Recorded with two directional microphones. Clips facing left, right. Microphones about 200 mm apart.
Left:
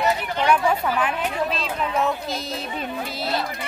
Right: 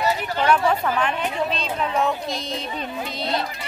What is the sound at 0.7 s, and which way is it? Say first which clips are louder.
A woman's voice: even; 5° left (ahead or behind).